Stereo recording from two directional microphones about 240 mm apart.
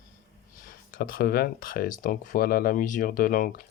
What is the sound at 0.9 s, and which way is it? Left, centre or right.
Speech, left.